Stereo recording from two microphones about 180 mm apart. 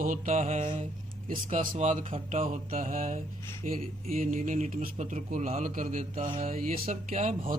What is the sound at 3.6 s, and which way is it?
A man's voice, 50° right (ahead or behind).